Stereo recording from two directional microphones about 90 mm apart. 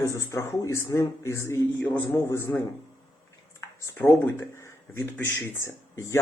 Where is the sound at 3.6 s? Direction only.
30° left (ahead or behind).